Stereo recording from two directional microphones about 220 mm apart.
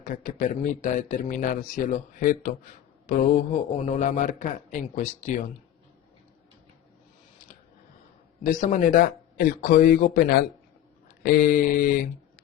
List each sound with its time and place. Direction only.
0.0 s a man's voice: 35° left (ahead or behind)
8.4 s a man's voice: 40° left (ahead or behind)